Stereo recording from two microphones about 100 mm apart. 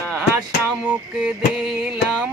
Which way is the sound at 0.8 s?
10° right (ahead or behind).